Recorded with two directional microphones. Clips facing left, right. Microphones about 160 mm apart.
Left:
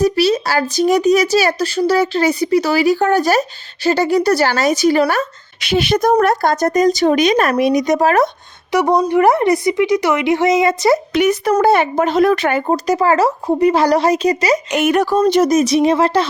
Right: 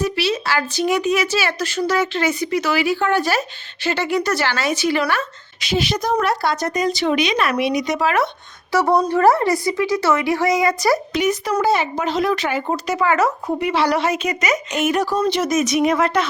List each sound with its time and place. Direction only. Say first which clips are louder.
0.0 s speech: left 7 dB; 40° left (ahead or behind)
5.5 s a woman's voice: left 6 dB; 60° left (ahead or behind); by 8.3 s 40° left (ahead or behind)
8.7 s speech: left 3 dB; 15° left (ahead or behind)
11.1 s speech: left 5 dB; 65° left (ahead or behind)
12.6 s speech: left 5 dB; 40° left (ahead or behind)
14.7 s speech: left 4 dB; 65° left (ahead or behind)
15.2 s speech: left 6 dB; 40° left (ahead or behind)